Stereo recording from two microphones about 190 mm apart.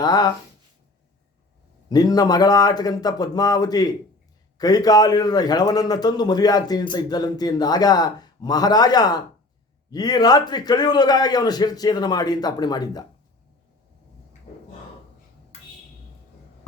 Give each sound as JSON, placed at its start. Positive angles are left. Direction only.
{"t": 0.0, "sound": "a man's voice", "side_deg": 20}
{"t": 1.9, "sound": "a man's voice", "side_deg": 20}